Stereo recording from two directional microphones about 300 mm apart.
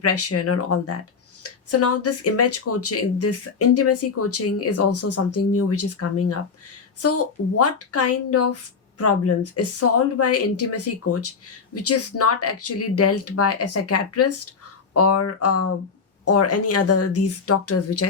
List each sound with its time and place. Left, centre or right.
0.0 s a woman's voice: left